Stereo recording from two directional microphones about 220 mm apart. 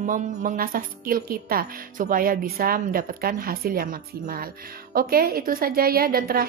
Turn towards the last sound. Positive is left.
turn(degrees=-40)  # may be behind; listen again after turning